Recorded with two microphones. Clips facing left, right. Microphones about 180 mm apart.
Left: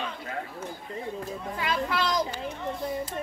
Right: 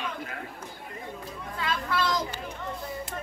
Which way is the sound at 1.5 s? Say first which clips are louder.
Left 1 dB; 15° left (ahead or behind).